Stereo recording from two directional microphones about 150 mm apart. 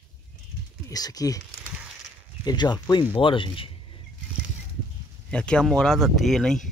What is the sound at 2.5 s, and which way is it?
Speech, 25° left (ahead or behind).